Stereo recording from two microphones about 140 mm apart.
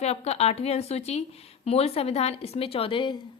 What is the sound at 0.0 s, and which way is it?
A woman's voice, 50° left (ahead or behind).